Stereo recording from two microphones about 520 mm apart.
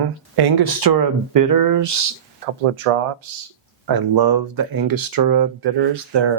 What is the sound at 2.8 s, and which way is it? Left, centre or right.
Speech, right.